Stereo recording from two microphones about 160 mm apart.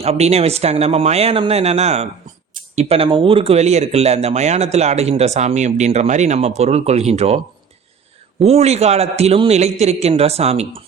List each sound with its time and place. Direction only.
0.0 s a man's voice: 40° right (ahead or behind)